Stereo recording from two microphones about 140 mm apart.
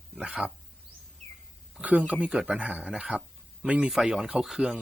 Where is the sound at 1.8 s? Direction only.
10° right (ahead or behind).